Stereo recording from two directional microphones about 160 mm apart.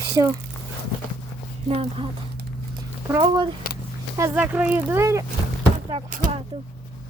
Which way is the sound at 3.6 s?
65° left (ahead or behind).